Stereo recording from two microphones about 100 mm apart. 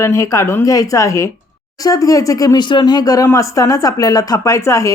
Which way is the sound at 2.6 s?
50° left (ahead or behind).